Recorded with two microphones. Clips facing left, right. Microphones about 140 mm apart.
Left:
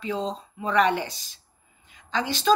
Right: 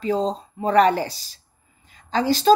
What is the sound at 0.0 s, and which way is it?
A woman's voice, 40° right (ahead or behind).